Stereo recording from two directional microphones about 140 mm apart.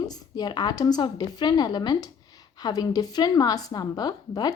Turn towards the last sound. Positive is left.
turn(degrees=30)  # may be behind; listen again after turning